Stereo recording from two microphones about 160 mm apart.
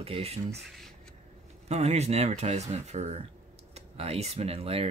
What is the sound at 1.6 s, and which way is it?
Speech, 45° right (ahead or behind).